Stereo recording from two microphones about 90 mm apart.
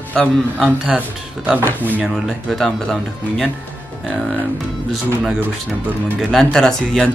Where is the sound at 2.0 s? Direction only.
Centre (ahead or behind).